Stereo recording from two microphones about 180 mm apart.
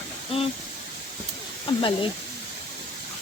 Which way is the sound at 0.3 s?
30° left (ahead or behind).